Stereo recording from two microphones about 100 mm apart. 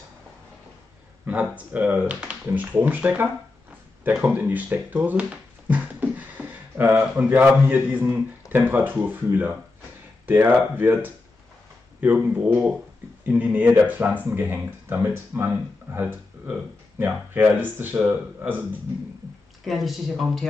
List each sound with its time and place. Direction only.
1.3 s a man's voice: 15° right (ahead or behind)
4.0 s a sound: 15° right (ahead or behind)
7.0 s a man's voice: 15° right (ahead or behind)
19.6 s speech: centre (ahead or behind)